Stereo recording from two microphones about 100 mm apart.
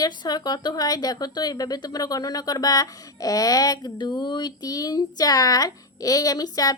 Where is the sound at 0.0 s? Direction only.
40° left (ahead or behind).